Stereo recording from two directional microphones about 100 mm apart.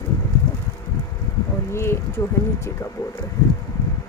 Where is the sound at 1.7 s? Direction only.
25° left (ahead or behind).